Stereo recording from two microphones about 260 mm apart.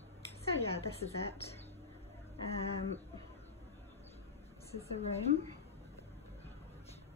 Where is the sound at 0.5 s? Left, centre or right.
Left.